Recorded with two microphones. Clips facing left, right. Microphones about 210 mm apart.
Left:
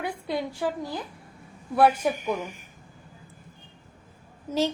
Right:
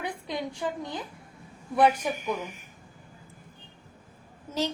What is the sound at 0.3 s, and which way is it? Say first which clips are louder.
A woman's voice: left 4 dB; 5° left (ahead or behind).